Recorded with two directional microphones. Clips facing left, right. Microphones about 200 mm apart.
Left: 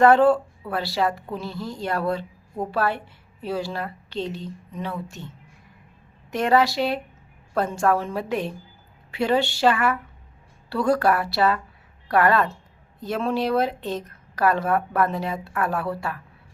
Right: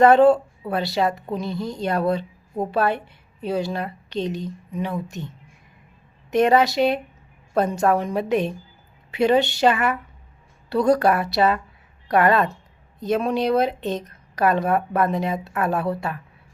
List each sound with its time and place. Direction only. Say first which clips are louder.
0.0 s a woman's voice: right 2 dB; 20° right (ahead or behind)
6.3 s a woman's voice: right 3 dB; 20° right (ahead or behind)